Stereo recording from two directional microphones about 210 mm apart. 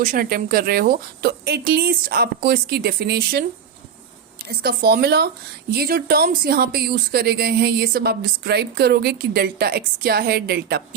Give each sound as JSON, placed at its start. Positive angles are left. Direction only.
{"t": 0.0, "sound": "speech", "side_deg": -40}
{"t": 4.4, "sound": "speech", "side_deg": -45}